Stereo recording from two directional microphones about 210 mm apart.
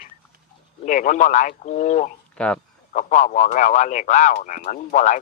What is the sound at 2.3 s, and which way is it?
Speech, 5° left (ahead or behind).